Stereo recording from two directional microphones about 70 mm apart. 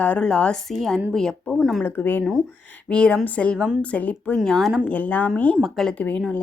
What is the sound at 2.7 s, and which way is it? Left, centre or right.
A woman's voice, centre.